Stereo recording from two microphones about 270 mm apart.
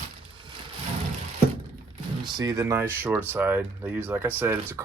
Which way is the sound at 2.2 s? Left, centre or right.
Centre.